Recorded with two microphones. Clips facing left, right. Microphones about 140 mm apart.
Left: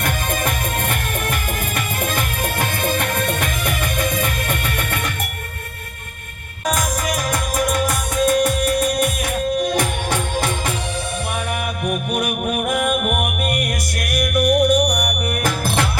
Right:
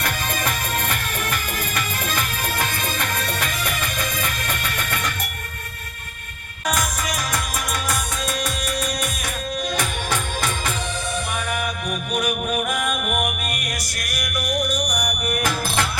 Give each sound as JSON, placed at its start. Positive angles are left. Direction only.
{"t": 0.0, "sound": "music", "side_deg": 50}
{"t": 6.7, "sound": "music", "side_deg": 50}
{"t": 11.9, "sound": "music", "side_deg": 60}